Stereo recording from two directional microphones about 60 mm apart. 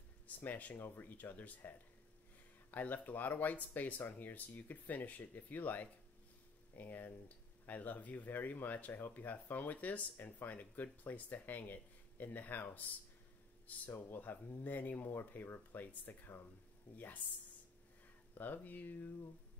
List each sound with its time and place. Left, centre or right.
0.4 s speech: left
13.9 s speech: left
18.4 s speech: left